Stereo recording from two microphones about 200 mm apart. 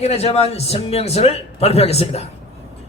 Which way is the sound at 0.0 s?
30° left (ahead or behind).